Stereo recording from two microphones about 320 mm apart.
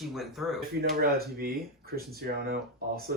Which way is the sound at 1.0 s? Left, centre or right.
Right.